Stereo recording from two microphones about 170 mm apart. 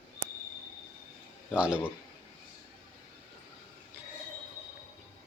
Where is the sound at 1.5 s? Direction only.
5° right (ahead or behind).